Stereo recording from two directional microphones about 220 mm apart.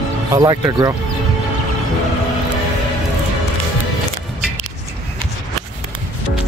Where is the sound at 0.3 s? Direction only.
20° right (ahead or behind).